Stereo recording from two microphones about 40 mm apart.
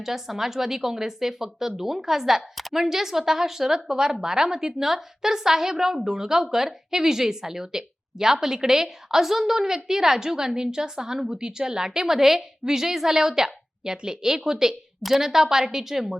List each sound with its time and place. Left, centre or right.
0.0 s a woman's voice: centre